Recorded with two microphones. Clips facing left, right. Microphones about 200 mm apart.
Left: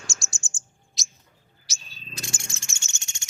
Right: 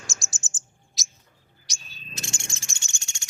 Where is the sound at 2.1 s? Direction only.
25° right (ahead or behind).